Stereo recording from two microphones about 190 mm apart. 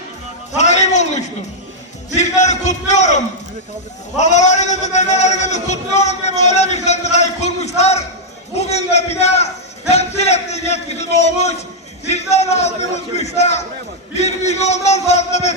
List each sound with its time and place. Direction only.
0.5 s a sound: 35° left (ahead or behind)
2.0 s speech: 35° left (ahead or behind)
4.2 s speech: 40° left (ahead or behind)